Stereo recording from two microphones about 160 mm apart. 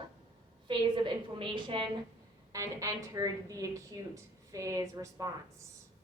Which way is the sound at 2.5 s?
20° right (ahead or behind).